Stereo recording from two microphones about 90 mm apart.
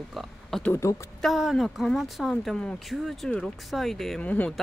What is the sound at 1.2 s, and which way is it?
Speech, centre (ahead or behind).